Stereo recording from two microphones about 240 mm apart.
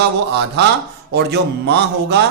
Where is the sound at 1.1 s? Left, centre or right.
Right.